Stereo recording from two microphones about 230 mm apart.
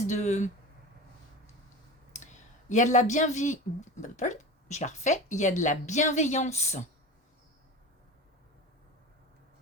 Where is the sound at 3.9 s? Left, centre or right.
Left.